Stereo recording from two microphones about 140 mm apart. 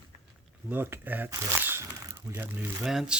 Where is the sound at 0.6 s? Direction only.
15° right (ahead or behind).